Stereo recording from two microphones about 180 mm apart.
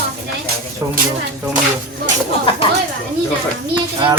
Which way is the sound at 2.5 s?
30° left (ahead or behind).